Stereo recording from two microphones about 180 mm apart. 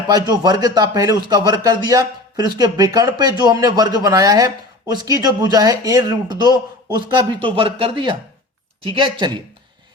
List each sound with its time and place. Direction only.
0.1 s a man's voice: 20° right (ahead or behind)